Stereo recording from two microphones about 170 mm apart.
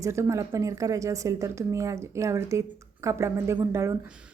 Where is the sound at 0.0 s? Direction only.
15° right (ahead or behind).